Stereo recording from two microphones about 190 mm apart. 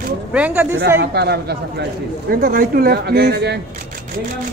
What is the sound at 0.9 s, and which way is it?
Speech, 60° right (ahead or behind).